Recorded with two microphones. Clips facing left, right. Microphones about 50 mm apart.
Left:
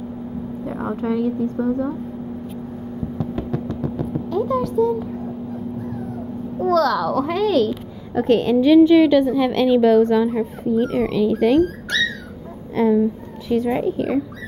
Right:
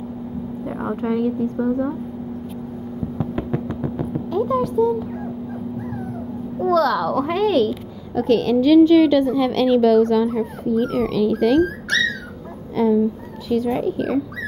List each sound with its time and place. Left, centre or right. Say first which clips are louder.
0.7 s a woman's voice: even; centre
3.2 s a sound: right 1 dB; right
4.1 s speech: right 1 dB; centre
6.6 s a woman's voice: even; centre
8.1 s a woman's voice: left 1 dB; left
12.7 s speech: left 1 dB; centre